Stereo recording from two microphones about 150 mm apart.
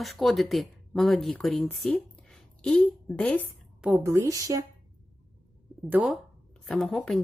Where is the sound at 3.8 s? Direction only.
5° right (ahead or behind).